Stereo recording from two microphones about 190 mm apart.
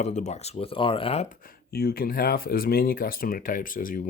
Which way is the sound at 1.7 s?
55° left (ahead or behind).